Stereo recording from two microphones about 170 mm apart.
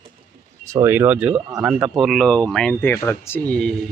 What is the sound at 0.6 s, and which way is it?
Speech, 15° right (ahead or behind).